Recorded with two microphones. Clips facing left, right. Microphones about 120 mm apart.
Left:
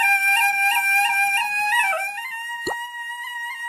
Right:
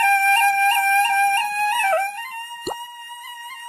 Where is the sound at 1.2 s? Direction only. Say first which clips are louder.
Right 5 dB; 35° right (ahead or behind).